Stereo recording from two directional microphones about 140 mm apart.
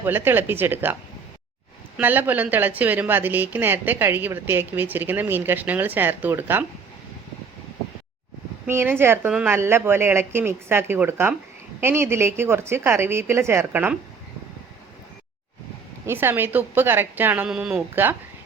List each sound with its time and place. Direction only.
0.0 s a woman's voice: 15° right (ahead or behind)
2.0 s a woman's voice: 15° right (ahead or behind)
8.6 s a woman's voice: 15° right (ahead or behind)
16.0 s a woman's voice: 15° right (ahead or behind)